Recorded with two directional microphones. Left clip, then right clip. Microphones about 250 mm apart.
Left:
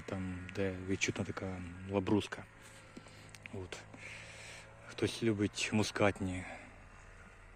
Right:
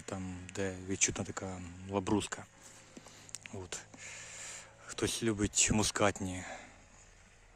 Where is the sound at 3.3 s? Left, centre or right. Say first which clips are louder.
Right 2 dB; centre.